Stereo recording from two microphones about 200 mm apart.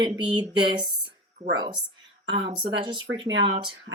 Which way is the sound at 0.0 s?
25° right (ahead or behind).